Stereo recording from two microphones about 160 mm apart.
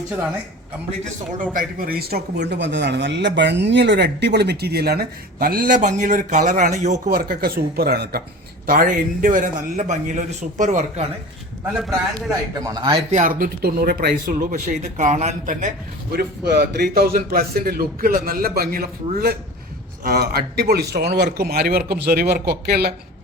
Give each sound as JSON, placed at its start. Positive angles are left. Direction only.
{"t": 1.5, "sound": "speech", "side_deg": -65}
{"t": 8.6, "sound": "speech", "side_deg": -60}
{"t": 12.5, "sound": "speech", "side_deg": -25}
{"t": 13.1, "sound": "speech", "side_deg": -50}
{"t": 16.1, "sound": "a man's voice", "side_deg": -90}